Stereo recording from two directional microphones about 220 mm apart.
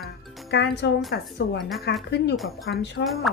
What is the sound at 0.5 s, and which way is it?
A woman's voice, 50° left (ahead or behind).